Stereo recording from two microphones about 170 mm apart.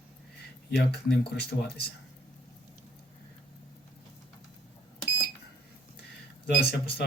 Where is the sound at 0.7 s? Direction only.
70° left (ahead or behind).